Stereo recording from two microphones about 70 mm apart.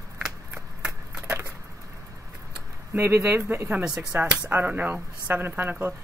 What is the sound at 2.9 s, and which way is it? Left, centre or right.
Speech, right.